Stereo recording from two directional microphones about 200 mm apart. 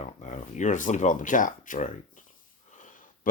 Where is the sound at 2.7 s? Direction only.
40° left (ahead or behind).